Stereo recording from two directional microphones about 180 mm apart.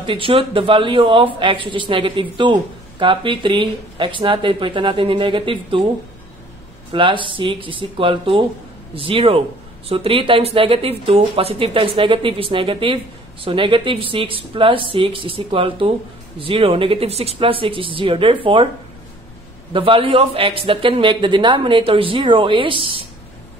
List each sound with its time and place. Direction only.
0.0 s speech: 30° right (ahead or behind)
6.9 s speech: 25° right (ahead or behind)
19.7 s speech: 30° right (ahead or behind)